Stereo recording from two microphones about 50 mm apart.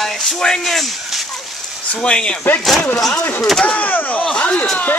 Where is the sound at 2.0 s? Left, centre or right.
Left.